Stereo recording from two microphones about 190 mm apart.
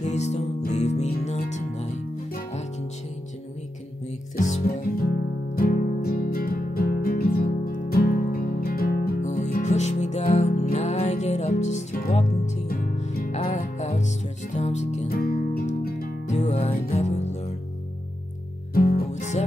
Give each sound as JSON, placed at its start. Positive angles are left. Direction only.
{"t": 0.0, "sound": "music", "side_deg": 35}
{"t": 4.4, "sound": "music", "side_deg": 40}
{"t": 5.5, "sound": "music", "side_deg": 50}
{"t": 13.3, "sound": "music", "side_deg": 35}
{"t": 15.0, "sound": "music", "side_deg": 50}
{"t": 18.8, "sound": "music", "side_deg": 50}